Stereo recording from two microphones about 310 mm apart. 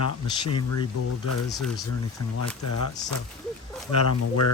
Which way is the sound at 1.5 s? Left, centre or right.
Centre.